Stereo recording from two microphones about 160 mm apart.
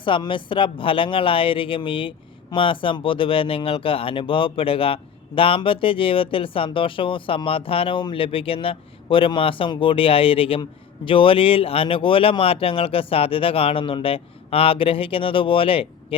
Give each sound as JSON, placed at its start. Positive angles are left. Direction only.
{"t": 0.0, "sound": "speech", "side_deg": 30}